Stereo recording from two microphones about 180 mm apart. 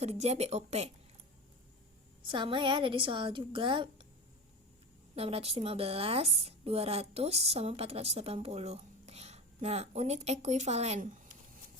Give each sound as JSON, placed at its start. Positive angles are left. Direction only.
{"t": 0.0, "sound": "speech", "side_deg": -35}
{"t": 2.2, "sound": "a woman's voice", "side_deg": -25}
{"t": 5.1, "sound": "speech", "side_deg": -35}